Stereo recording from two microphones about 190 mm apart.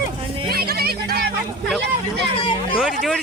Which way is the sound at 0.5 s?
55° right (ahead or behind).